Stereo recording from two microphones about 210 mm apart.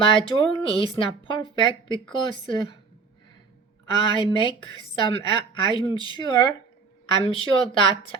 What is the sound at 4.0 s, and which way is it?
Speech, 25° left (ahead or behind).